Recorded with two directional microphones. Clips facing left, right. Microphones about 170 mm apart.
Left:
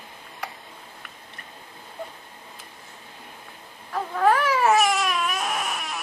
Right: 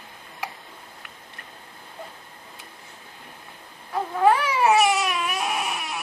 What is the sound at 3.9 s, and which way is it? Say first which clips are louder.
Baby cry: right 1 dB; 15° right (ahead or behind).